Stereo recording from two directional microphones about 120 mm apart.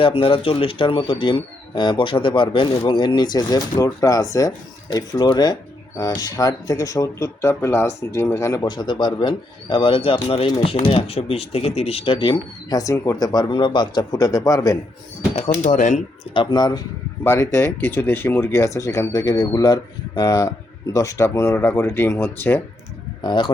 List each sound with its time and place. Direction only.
0.0 s speech: 50° left (ahead or behind); by 8.6 s 25° left (ahead or behind)
8.6 s speech: 40° left (ahead or behind)
12.8 s speech: 25° left (ahead or behind)
15.4 s speech: 90° left
16.2 s speech: 45° left (ahead or behind)
17.2 s speech: 20° left (ahead or behind)
23.2 s speech: 40° left (ahead or behind)